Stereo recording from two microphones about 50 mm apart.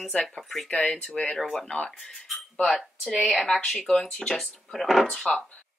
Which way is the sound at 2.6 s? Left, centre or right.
Centre.